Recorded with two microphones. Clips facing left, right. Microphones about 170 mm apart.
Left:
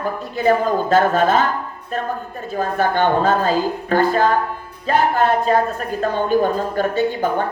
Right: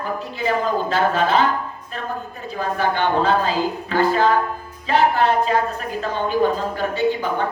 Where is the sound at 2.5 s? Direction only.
45° left (ahead or behind).